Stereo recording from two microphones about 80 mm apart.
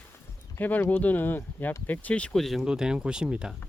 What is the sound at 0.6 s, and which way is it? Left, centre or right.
Speech, left.